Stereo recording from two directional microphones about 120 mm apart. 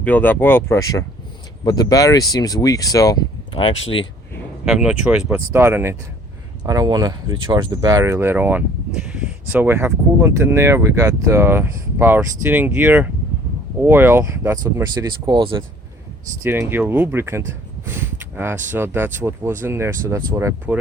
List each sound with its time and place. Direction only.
0.0 s speech: 15° left (ahead or behind); by 3.2 s 30° left (ahead or behind)
3.5 s speech: 45° left (ahead or behind)
4.6 s speech: 5° right (ahead or behind)
5.5 s speech: 20° right (ahead or behind)
6.7 s speech: 30° right (ahead or behind)
16.4 s speech: 20° right (ahead or behind)